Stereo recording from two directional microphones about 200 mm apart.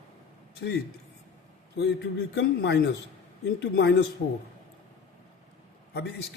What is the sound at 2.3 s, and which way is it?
Speech, 60° left (ahead or behind).